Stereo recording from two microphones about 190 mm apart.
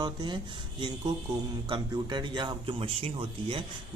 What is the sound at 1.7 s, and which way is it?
Speech, 25° right (ahead or behind).